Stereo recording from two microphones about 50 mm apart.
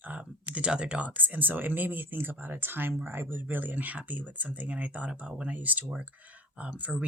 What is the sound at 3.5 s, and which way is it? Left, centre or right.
Speech, right.